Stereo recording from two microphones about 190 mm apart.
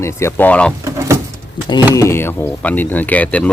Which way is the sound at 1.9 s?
15° left (ahead or behind).